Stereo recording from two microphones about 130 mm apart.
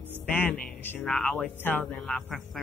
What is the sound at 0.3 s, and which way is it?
Speech, 10° left (ahead or behind).